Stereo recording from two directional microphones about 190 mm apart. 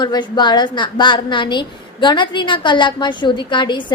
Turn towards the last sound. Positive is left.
turn(degrees=25)  # may be behind; listen again after turning